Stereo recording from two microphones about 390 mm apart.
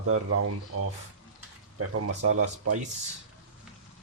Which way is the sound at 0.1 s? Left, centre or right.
Right.